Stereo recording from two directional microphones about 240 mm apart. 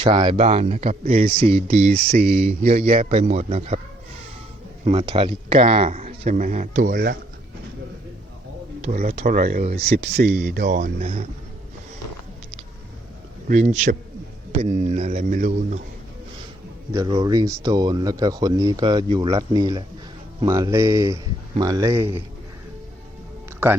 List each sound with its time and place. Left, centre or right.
0.0 s speech: centre
4.9 s speech: right
8.8 s speech: right
10.8 s speech: right
13.5 s speech: right
16.9 s speech: centre